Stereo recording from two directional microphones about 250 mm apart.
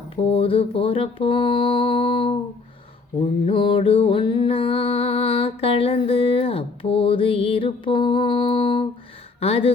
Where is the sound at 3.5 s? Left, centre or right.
Left.